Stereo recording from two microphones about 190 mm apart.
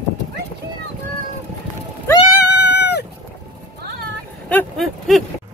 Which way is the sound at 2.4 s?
60° left (ahead or behind).